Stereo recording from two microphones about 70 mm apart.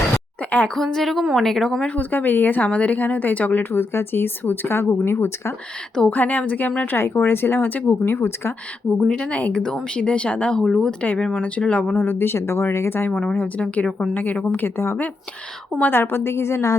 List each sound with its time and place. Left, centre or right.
0.7 s a woman's voice: centre
1.9 s speech: left
9.0 s speech: centre; by 13.1 s left
13.3 s speech: left